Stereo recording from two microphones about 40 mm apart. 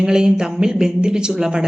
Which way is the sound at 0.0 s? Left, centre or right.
Centre.